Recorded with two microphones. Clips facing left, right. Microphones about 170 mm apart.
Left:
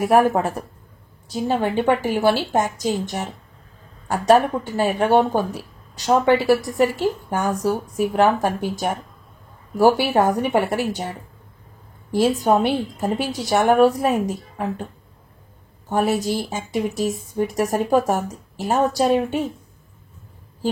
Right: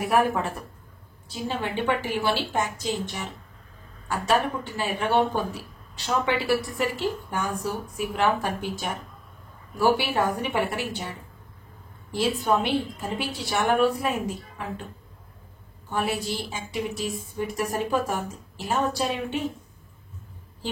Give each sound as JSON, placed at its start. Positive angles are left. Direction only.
{"t": 0.0, "sound": "a woman's voice", "side_deg": 45}
{"t": 15.9, "sound": "speech", "side_deg": 45}